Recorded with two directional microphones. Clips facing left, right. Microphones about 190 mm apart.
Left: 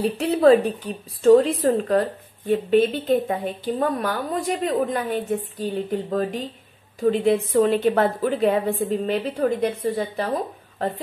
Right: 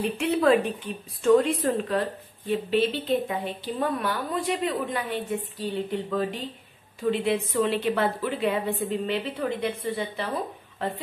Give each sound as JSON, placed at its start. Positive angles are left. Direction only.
{"t": 0.0, "sound": "a woman's voice", "side_deg": 35}